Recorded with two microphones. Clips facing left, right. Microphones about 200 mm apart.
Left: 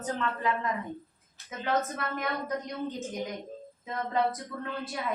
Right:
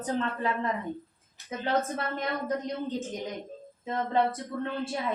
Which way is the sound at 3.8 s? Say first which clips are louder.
Right 2 dB; 30° right (ahead or behind).